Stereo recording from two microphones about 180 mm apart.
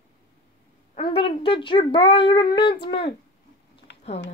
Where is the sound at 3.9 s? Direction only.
70° left (ahead or behind).